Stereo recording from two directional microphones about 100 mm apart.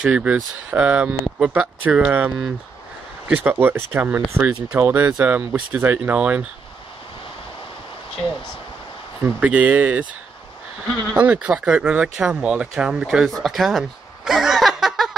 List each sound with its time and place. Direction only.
0.0 s speech: 10° right (ahead or behind)
9.2 s speech: 15° right (ahead or behind)
11.1 s speech: 15° right (ahead or behind)